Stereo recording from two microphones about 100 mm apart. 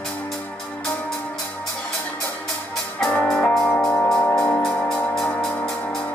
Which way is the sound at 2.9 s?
10° left (ahead or behind).